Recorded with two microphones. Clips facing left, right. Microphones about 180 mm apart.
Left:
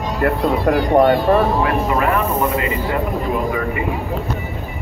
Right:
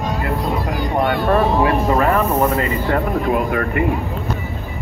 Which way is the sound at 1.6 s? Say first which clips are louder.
Right 2 dB; 40° right (ahead or behind).